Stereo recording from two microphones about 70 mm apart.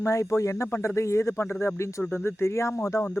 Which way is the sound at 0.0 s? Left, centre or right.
Left.